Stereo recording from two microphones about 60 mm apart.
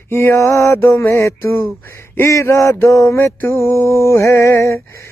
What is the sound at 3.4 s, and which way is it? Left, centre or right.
Male singing, left.